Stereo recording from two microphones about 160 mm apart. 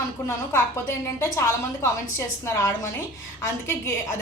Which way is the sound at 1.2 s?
20° left (ahead or behind).